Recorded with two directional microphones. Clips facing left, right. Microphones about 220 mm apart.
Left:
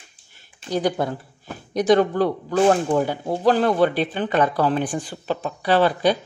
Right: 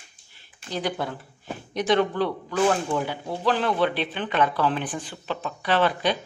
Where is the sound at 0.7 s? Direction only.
45° left (ahead or behind).